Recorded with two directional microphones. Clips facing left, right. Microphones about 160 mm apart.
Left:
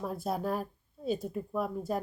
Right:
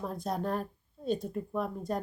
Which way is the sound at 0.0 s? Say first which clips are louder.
Left 1 dB; 5° left (ahead or behind).